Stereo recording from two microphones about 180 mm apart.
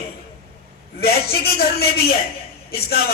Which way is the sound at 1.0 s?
60° left (ahead or behind).